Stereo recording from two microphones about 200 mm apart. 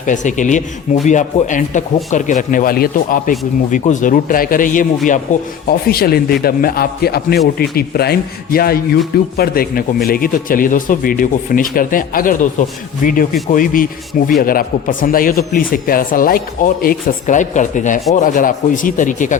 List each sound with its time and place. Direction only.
0.0 s speech: 40° left (ahead or behind)